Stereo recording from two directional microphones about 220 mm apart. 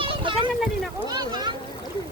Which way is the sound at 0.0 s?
25° right (ahead or behind).